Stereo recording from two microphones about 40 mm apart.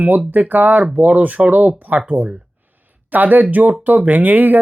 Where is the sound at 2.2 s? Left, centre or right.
Right.